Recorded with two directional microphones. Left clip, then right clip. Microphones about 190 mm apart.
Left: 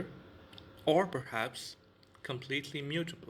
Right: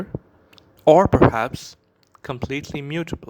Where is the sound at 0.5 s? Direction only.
55° right (ahead or behind).